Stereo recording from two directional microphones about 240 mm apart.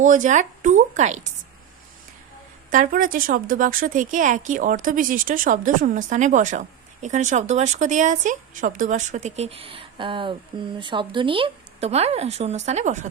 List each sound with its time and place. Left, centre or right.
0.0 s speech: right
2.6 s speech: right